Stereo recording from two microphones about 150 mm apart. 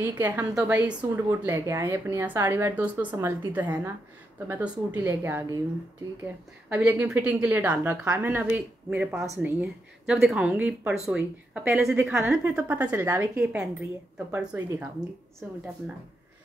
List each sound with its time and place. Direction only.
0.0 s a woman's voice: 10° right (ahead or behind)
15.4 s a woman's voice: 10° right (ahead or behind)